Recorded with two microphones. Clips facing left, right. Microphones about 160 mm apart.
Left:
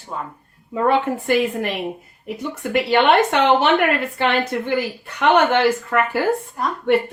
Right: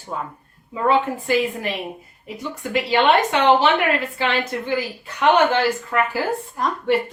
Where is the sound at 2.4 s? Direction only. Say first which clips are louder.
Left 2 dB; 60° left (ahead or behind).